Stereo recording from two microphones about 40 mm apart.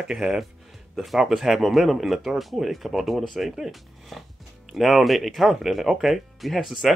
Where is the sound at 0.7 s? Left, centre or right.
Centre.